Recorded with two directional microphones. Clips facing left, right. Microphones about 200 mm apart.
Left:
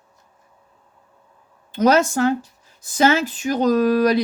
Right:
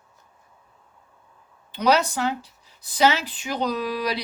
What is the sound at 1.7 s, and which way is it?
Speech, 45° left (ahead or behind).